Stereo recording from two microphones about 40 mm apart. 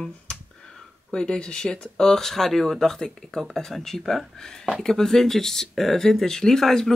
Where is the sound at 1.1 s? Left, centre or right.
Centre.